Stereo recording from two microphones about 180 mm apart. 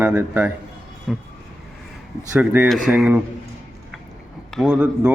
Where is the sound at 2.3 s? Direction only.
10° right (ahead or behind).